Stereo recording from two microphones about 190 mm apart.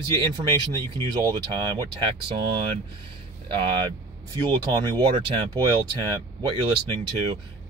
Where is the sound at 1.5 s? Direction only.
25° right (ahead or behind).